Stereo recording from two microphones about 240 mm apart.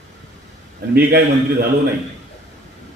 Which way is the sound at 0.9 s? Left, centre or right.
Right.